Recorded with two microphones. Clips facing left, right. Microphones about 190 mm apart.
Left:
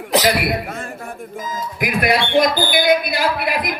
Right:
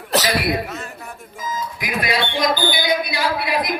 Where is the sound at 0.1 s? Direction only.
15° left (ahead or behind).